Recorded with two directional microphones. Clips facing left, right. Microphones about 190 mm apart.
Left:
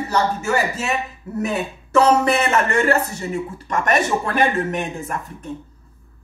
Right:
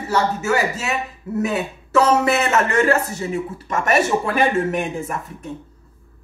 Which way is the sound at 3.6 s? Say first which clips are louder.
Right 1 dB; 5° right (ahead or behind).